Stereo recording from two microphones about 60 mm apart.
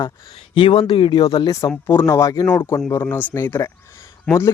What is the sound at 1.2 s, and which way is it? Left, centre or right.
Speech, left.